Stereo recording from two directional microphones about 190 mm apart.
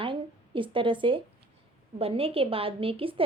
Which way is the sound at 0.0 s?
25° right (ahead or behind).